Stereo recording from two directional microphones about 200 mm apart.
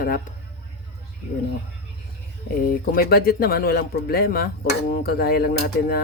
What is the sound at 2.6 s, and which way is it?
Speech, 50° left (ahead or behind).